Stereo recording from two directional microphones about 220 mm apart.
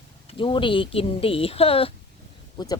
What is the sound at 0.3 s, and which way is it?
Speech, 25° left (ahead or behind).